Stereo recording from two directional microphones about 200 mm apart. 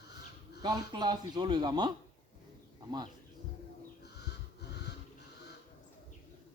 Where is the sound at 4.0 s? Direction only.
55° left (ahead or behind).